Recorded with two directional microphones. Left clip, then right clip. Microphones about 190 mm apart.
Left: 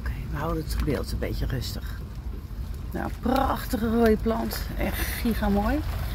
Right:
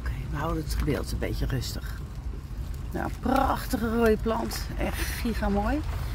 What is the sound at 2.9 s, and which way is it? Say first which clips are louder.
Speech: even; 10° right (ahead or behind).